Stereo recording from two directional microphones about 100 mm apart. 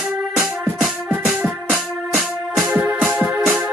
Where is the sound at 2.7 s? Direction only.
15° right (ahead or behind).